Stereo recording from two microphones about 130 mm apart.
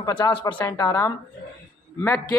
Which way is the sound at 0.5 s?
25° left (ahead or behind).